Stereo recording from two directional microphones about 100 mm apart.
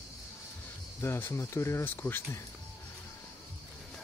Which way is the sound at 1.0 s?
25° left (ahead or behind).